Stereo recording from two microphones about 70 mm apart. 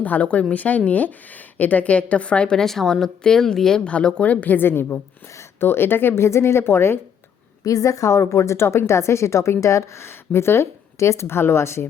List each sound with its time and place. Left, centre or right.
0.0 s a woman's voice: left
7.6 s a woman's voice: left